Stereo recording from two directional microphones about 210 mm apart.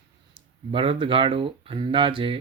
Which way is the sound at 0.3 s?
25° right (ahead or behind).